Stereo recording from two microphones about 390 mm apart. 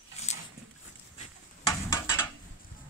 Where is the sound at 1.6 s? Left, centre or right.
Centre.